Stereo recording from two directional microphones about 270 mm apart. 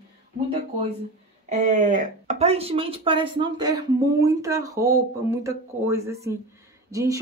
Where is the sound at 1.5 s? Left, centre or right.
Right.